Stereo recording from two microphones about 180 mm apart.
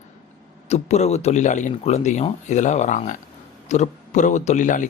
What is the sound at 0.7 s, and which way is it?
Speech, 40° left (ahead or behind).